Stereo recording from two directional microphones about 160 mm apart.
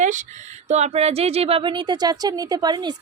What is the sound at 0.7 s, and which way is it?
A woman's voice, 40° right (ahead or behind).